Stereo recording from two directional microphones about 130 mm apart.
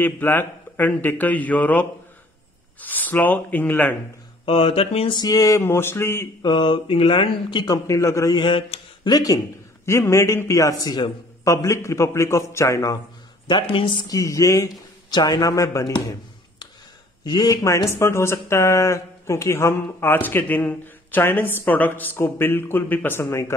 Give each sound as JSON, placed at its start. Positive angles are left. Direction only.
{"t": 0.0, "sound": "speech", "side_deg": 15}
{"t": 4.5, "sound": "speech", "side_deg": 45}
{"t": 5.1, "sound": "a man's voice", "side_deg": 30}
{"t": 6.4, "sound": "speech", "side_deg": 35}
{"t": 7.6, "sound": "a man's voice", "side_deg": 25}
{"t": 9.1, "sound": "a man's voice", "side_deg": 30}
{"t": 13.5, "sound": "speech", "side_deg": 35}